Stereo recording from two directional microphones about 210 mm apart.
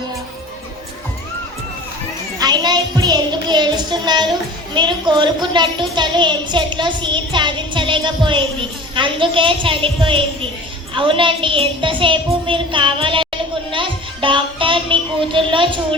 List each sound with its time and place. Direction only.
2.4 s child singing: 20° right (ahead or behind)
4.7 s a child's voice: 20° right (ahead or behind)
13.7 s music: 25° right (ahead or behind)